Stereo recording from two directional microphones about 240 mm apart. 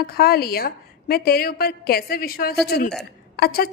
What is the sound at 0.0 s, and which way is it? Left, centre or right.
A woman's voice, left.